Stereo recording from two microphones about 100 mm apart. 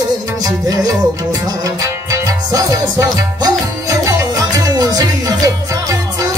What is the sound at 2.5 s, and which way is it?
Music, 35° right (ahead or behind).